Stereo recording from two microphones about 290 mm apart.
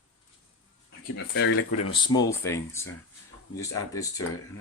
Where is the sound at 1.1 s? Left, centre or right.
Left.